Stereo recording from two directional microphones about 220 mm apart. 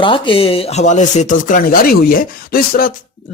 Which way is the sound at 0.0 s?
25° left (ahead or behind).